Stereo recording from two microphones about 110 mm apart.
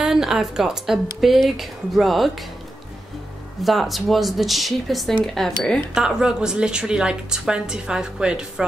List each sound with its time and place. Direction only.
0.0 s speech: 5° right (ahead or behind)
3.6 s a woman's voice: centre (ahead or behind)